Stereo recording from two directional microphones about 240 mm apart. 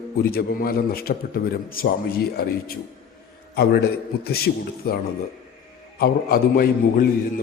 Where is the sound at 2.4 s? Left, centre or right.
Left.